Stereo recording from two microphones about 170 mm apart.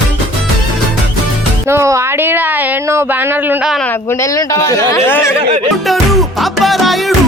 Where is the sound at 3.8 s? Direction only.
15° left (ahead or behind).